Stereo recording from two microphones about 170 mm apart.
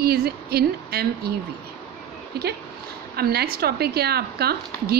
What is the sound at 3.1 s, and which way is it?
A woman's voice, 65° right (ahead or behind).